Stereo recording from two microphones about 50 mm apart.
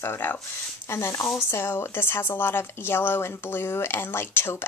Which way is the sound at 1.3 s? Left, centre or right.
Left.